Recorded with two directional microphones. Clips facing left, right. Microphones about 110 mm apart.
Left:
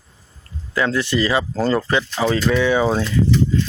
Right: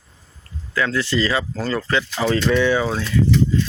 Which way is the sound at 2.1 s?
5° left (ahead or behind).